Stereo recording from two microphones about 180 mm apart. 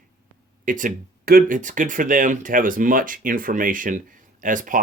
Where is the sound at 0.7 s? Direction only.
45° right (ahead or behind).